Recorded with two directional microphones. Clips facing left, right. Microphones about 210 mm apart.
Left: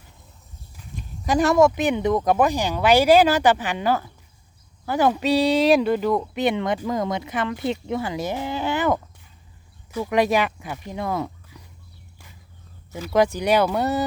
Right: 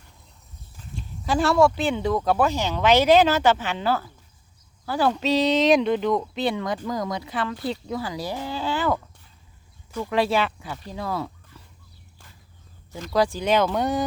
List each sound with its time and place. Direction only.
1.2 s speech: 15° left (ahead or behind)
6.4 s speech: 20° left (ahead or behind)
13.1 s speech: 20° left (ahead or behind)